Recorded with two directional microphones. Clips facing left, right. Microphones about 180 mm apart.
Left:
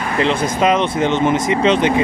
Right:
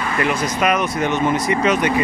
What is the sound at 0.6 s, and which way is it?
Speech, 25° left (ahead or behind).